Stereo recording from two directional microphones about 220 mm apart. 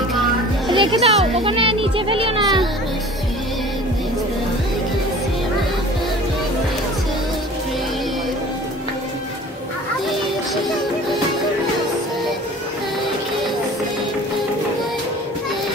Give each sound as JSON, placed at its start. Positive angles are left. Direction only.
{"t": 0.7, "sound": "a child's voice", "side_deg": -20}